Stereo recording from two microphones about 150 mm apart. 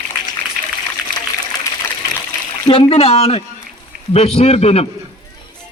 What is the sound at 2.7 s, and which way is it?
A man's voice, 40° left (ahead or behind).